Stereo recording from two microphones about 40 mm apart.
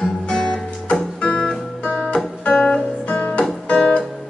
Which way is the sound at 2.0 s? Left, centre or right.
Left.